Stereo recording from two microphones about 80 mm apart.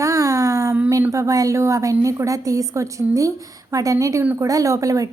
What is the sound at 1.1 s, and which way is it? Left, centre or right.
A woman's voice, right.